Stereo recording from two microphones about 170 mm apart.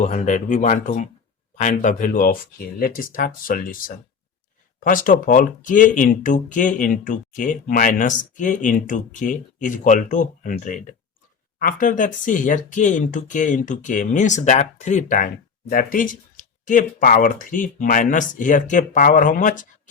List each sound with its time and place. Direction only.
0.0 s speech: 45° left (ahead or behind)
15.7 s speech: 55° left (ahead or behind)